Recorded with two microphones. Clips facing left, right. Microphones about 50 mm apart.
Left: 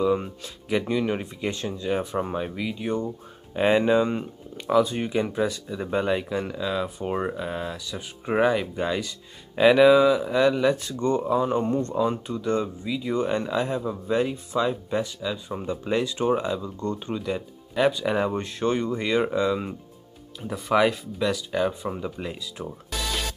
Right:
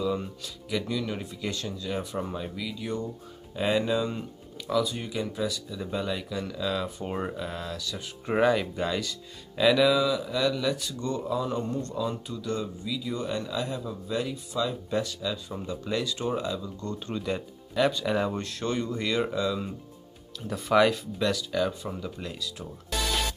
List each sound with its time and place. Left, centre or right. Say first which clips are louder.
0.0 s speech: left 6 dB; left
6.6 s speech: left 3 dB; centre
9.6 s speech: left 6 dB; left
14.9 s speech: left 2 dB; centre
20.5 s speech: left 1 dB; centre
21.5 s speech: left 3 dB; left